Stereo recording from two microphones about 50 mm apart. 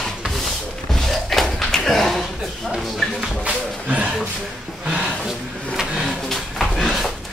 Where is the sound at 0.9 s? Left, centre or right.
Centre.